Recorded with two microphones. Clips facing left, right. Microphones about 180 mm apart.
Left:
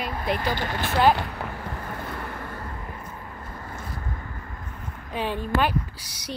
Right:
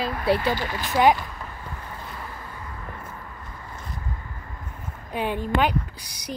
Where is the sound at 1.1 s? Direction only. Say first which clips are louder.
Even; 70° left (ahead or behind).